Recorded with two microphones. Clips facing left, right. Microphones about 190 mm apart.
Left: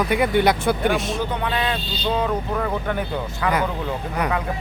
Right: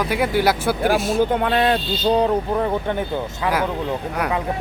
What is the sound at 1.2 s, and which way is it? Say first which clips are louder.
Speech: right 6 dB; 50° right (ahead or behind).